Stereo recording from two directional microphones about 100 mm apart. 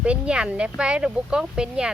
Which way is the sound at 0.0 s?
10° right (ahead or behind).